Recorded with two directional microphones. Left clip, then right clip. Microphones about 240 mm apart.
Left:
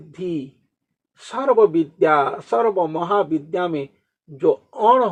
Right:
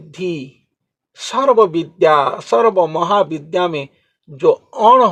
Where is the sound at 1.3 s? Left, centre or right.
Centre.